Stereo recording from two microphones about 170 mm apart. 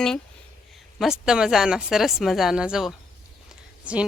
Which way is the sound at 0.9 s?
Centre (ahead or behind).